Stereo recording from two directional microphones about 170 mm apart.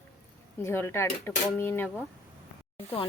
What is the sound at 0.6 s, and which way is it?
Speech, 15° left (ahead or behind).